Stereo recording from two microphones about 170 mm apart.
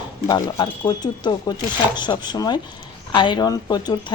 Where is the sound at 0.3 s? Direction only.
25° left (ahead or behind).